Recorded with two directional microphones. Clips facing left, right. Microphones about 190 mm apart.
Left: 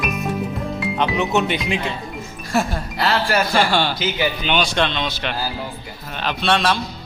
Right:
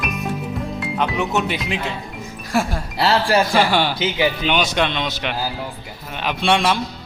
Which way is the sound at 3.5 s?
10° right (ahead or behind).